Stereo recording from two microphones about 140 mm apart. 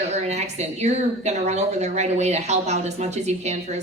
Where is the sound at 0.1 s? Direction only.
55° right (ahead or behind).